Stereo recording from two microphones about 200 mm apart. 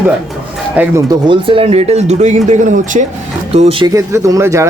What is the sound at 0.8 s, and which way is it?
Speech, 15° right (ahead or behind).